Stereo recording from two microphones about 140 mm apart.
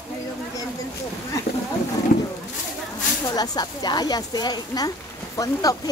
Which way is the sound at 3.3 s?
30° left (ahead or behind).